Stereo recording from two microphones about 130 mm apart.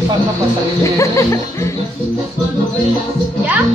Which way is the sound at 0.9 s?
25° left (ahead or behind).